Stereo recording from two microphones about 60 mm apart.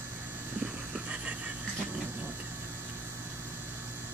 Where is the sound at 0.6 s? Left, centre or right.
Right.